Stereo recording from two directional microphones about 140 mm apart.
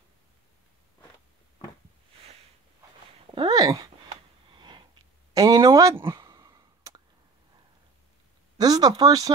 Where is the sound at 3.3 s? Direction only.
35° right (ahead or behind).